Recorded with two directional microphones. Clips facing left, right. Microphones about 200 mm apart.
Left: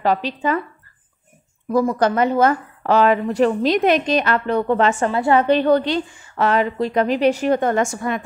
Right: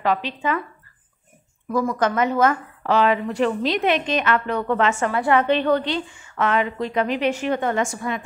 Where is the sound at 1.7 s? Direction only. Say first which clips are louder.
Left 4 dB; 35° left (ahead or behind).